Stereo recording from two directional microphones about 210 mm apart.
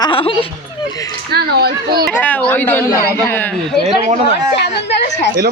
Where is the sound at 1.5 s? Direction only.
50° right (ahead or behind).